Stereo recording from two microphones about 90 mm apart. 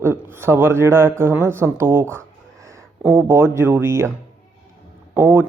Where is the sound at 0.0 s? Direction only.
25° right (ahead or behind).